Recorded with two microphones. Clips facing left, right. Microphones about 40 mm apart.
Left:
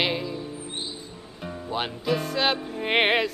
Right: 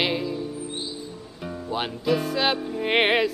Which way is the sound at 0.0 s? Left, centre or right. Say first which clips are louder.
Right 2 dB; centre.